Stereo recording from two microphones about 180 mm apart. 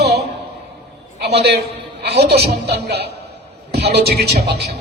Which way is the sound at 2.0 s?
65° right (ahead or behind).